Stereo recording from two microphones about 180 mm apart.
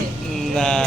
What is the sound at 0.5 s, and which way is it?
Speech, 5° left (ahead or behind).